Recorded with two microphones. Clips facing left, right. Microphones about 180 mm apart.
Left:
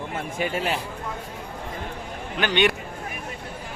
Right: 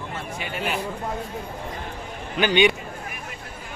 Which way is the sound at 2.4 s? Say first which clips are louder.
Right 3 dB; centre (ahead or behind).